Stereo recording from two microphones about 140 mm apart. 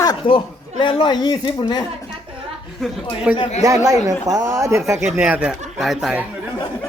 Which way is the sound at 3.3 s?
10° right (ahead or behind).